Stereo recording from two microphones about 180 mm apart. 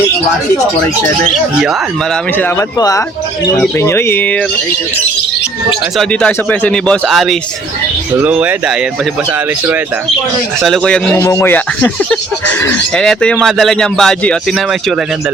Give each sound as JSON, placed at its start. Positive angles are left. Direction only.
{"t": 2.4, "sound": "speech", "side_deg": 20}
{"t": 6.0, "sound": "speech", "side_deg": 5}
{"t": 10.6, "sound": "speech", "side_deg": 5}
{"t": 11.2, "sound": "speech", "side_deg": 15}